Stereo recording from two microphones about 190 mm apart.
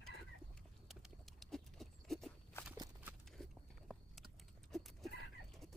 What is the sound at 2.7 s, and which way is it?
Horse, 20° right (ahead or behind).